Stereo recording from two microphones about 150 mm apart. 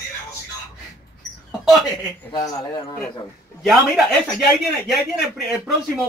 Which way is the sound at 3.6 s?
Centre (ahead or behind).